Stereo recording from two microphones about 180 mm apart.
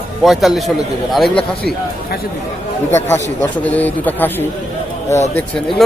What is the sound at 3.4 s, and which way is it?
Speech, 10° left (ahead or behind).